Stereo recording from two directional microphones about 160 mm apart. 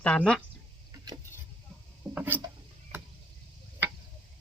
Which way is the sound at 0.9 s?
25° right (ahead or behind).